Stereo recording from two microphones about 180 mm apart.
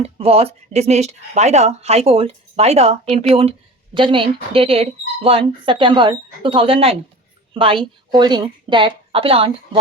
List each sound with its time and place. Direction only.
0.0 s speech: 35° right (ahead or behind)